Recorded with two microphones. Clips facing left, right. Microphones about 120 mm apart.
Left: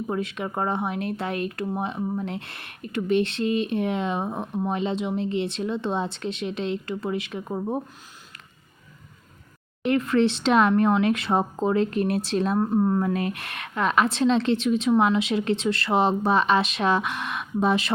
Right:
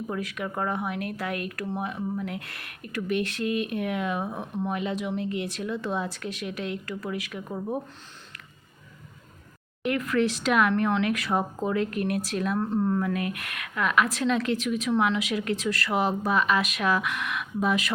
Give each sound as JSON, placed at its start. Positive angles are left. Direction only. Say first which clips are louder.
{"t": 0.1, "sound": "speech", "louder": "left 4 dB", "side_deg": 25}
{"t": 9.8, "sound": "speech", "louder": "left 4 dB", "side_deg": 30}
{"t": 12.7, "sound": "speech", "louder": "left 3 dB", "side_deg": 15}
{"t": 13.1, "sound": "speech", "louder": "left 3 dB", "side_deg": 30}